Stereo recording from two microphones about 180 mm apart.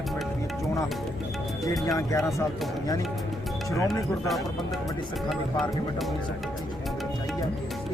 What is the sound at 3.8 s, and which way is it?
Speech, centre (ahead or behind).